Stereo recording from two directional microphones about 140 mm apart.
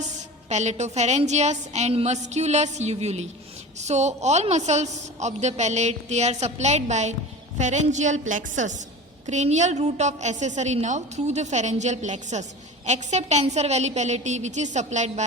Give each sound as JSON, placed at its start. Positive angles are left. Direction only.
{"t": 0.4, "sound": "a woman's voice", "side_deg": -55}